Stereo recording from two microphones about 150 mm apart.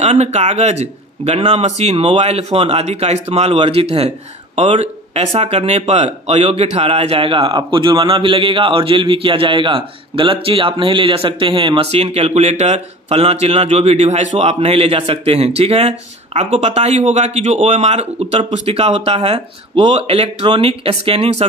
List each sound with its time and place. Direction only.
0.0 s speech: 50° right (ahead or behind)